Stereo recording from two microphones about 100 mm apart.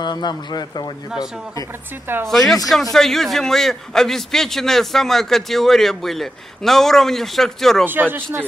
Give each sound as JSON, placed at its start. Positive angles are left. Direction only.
{"t": 0.0, "sound": "speech", "side_deg": 45}
{"t": 2.2, "sound": "a man's voice", "side_deg": 5}
{"t": 7.8, "sound": "speech", "side_deg": -20}